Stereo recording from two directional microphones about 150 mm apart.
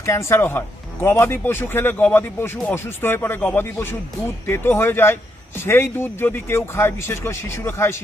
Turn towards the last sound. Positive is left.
turn(degrees=15)  # may be behind; listen again after turning